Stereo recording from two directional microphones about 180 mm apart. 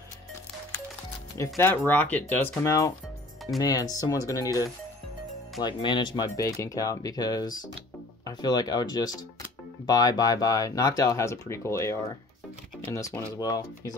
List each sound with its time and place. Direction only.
1.4 s speech: 10° left (ahead or behind)